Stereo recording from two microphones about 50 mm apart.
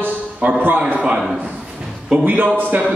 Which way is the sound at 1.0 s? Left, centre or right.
Centre.